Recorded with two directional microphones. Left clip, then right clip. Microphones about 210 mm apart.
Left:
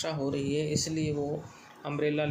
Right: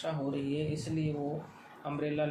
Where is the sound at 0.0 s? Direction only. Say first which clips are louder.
Left 3 dB; 40° left (ahead or behind).